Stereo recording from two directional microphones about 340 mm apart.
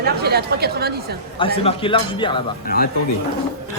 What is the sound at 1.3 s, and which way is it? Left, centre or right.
Speech, centre.